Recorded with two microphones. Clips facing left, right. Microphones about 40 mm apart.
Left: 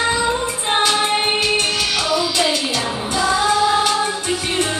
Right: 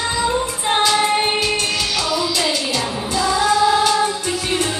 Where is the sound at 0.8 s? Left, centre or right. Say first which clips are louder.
Right 1 dB; left.